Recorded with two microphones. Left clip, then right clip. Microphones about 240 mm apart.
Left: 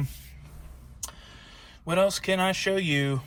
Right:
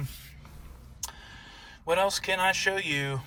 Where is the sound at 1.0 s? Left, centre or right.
Right.